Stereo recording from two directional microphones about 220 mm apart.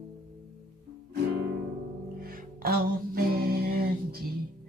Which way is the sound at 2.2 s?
40° right (ahead or behind).